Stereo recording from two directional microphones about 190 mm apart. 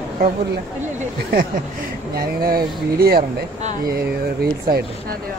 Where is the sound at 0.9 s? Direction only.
45° right (ahead or behind).